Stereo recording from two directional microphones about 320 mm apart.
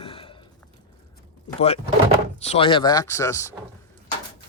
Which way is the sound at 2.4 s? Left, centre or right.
Centre.